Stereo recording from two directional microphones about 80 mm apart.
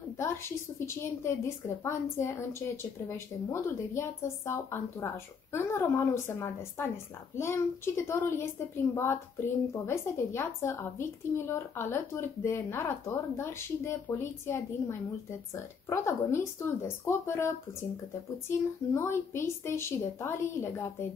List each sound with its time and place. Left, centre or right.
0.2 s a woman's voice: left
18.9 s a woman's voice: left